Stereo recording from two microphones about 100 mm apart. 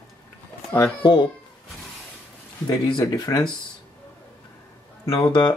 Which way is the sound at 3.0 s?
35° left (ahead or behind).